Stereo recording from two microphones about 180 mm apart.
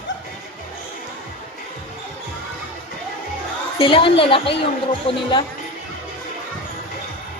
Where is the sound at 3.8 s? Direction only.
30° left (ahead or behind).